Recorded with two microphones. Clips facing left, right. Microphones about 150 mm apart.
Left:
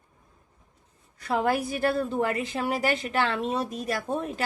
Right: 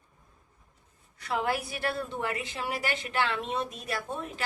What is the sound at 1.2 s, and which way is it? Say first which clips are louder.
A woman's voice: left 5 dB; 45° left (ahead or behind).